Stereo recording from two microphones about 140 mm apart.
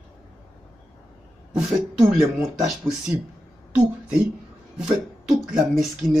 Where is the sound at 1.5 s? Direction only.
5° right (ahead or behind).